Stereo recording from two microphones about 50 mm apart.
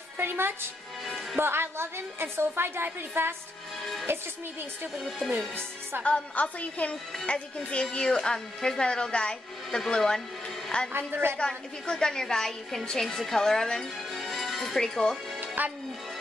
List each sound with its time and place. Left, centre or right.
0.2 s a woman's voice: right
6.0 s a woman's voice: left
10.9 s a woman's voice: right
11.3 s a woman's voice: centre
15.4 s music: right